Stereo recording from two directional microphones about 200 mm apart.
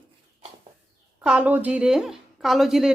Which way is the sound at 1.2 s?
5° right (ahead or behind).